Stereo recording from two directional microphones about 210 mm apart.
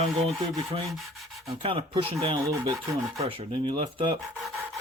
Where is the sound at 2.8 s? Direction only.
15° right (ahead or behind).